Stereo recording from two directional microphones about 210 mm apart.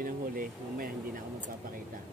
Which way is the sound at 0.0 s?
40° right (ahead or behind).